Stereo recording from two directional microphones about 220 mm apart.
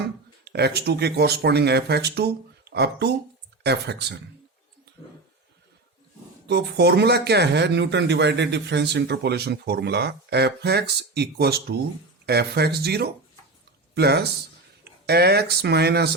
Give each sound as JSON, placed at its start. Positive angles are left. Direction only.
{"t": 0.4, "sound": "speech", "side_deg": -50}
{"t": 6.5, "sound": "speech", "side_deg": -50}